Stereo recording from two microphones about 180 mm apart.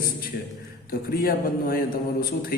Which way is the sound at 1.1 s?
55° left (ahead or behind).